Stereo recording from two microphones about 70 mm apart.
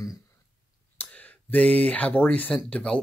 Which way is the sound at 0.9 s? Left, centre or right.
Left.